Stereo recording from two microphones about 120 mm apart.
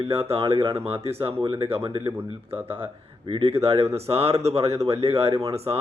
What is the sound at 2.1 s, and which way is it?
Speech, 20° right (ahead or behind).